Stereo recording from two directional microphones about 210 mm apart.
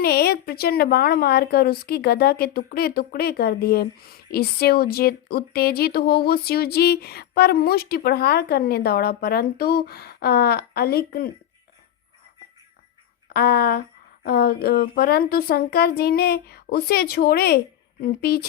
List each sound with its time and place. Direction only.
0.0 s a woman's voice: 50° left (ahead or behind)
13.2 s a woman's voice: 45° left (ahead or behind)